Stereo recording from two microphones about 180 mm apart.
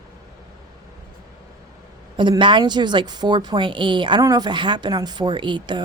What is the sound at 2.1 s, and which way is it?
A woman's voice, 25° right (ahead or behind).